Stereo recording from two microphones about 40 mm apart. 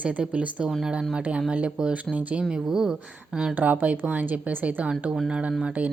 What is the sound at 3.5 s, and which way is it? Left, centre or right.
A woman's voice, right.